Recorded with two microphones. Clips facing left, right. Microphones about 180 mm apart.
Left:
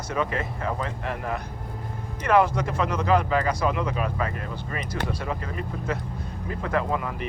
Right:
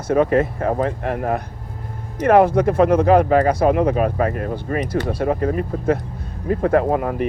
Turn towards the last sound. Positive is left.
turn(degrees=-50)  # may be behind; listen again after turning